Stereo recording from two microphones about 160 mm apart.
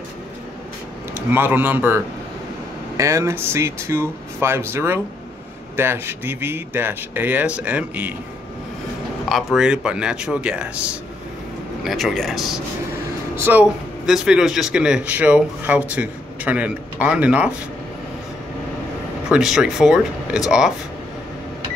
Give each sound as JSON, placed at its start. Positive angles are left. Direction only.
{"t": 1.3, "sound": "speech", "side_deg": -10}
{"t": 3.0, "sound": "speech", "side_deg": -20}
{"t": 9.3, "sound": "speech", "side_deg": 0}
{"t": 13.4, "sound": "speech", "side_deg": -10}
{"t": 19.2, "sound": "speech", "side_deg": -5}